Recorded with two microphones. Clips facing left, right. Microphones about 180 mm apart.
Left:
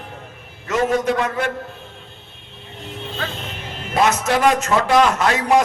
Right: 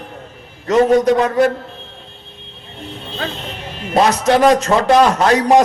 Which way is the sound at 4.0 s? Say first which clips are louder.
Right 5 dB; 35° right (ahead or behind).